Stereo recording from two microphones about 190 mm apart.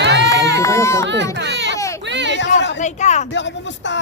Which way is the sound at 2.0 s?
70° right (ahead or behind).